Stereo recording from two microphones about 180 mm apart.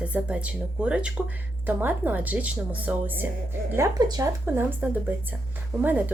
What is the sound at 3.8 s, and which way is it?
A woman's voice, 20° right (ahead or behind).